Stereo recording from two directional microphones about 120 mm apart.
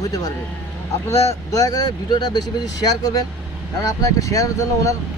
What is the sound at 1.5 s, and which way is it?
Speech, 30° left (ahead or behind).